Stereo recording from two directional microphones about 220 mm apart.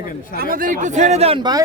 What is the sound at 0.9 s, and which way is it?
Speech, 30° right (ahead or behind).